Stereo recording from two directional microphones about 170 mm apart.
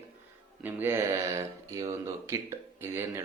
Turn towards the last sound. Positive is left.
turn(degrees=-15)  # may be behind; listen again after turning